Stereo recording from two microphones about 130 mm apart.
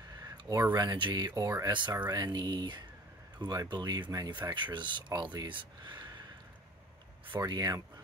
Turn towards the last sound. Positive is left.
turn(degrees=-30)  # may be behind; listen again after turning